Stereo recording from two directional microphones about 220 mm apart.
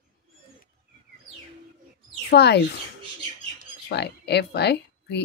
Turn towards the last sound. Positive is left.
turn(degrees=50)  # may be behind; listen again after turning